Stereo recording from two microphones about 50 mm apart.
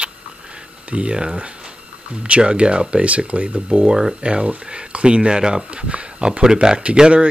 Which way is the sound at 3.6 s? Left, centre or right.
Centre.